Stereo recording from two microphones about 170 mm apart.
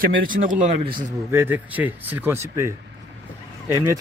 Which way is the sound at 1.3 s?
15° right (ahead or behind).